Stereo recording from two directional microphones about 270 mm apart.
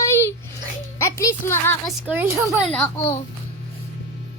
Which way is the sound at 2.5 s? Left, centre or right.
Centre.